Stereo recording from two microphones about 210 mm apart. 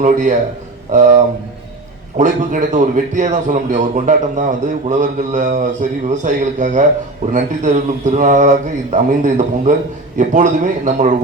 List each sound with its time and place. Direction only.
0.0 s a man's voice: 35° right (ahead or behind)